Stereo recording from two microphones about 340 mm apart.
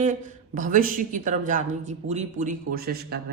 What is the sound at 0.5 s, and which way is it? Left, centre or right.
A man's voice, right.